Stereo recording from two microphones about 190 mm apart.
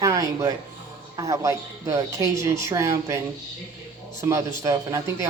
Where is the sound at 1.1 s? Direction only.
15° right (ahead or behind).